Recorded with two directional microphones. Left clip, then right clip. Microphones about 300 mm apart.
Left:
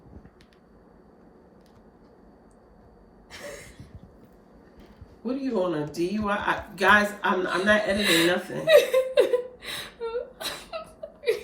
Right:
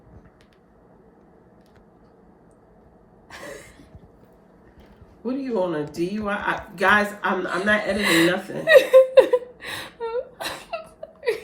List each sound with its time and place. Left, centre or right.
5.2 s speech: centre
7.9 s speech: right
8.6 s a sound: right